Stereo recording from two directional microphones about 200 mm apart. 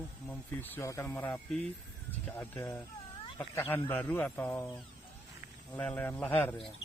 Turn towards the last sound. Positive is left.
turn(degrees=10)  # may be behind; listen again after turning